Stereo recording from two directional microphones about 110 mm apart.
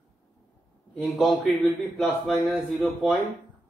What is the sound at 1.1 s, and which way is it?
A man's voice, centre (ahead or behind).